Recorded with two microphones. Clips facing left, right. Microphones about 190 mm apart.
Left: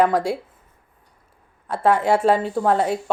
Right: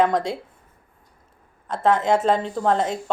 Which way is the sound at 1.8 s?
10° left (ahead or behind).